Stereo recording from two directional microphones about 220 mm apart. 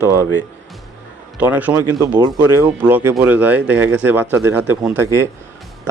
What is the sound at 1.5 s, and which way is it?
Speech, 5° right (ahead or behind).